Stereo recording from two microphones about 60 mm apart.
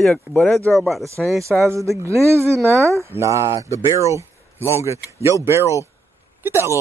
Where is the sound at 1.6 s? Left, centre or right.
Right.